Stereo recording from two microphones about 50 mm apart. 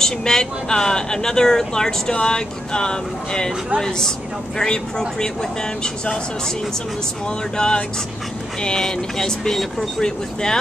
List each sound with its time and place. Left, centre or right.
0.0 s speech: centre
7.5 s speech: centre